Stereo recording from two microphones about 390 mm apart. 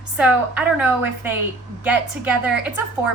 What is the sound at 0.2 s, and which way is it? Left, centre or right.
A woman's voice, centre.